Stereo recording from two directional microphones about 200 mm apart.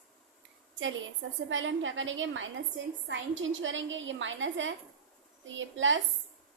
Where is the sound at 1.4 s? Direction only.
75° right (ahead or behind).